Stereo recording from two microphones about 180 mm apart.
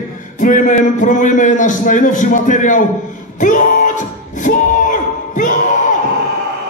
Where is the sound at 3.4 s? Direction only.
45° left (ahead or behind).